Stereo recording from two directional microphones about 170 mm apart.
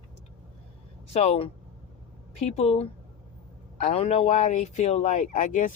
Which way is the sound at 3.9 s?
35° left (ahead or behind).